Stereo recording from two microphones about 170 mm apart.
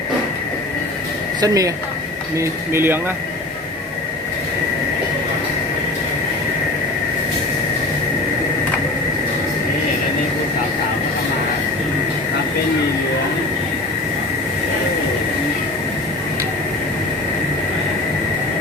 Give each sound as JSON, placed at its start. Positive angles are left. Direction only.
{"t": 1.4, "sound": "a woman's voice", "side_deg": -20}